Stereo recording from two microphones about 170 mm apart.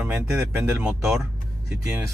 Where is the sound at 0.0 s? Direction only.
10° right (ahead or behind).